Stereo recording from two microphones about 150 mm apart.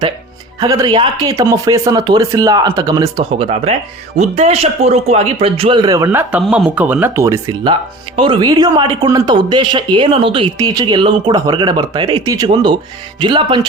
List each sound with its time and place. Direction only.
0.6 s speech: 25° right (ahead or behind)
3.3 s speech: 40° right (ahead or behind); by 6.1 s 25° right (ahead or behind)
6.1 s speech: 10° right (ahead or behind)
7.6 s speech: 35° right (ahead or behind)
10.6 s speech: 25° right (ahead or behind)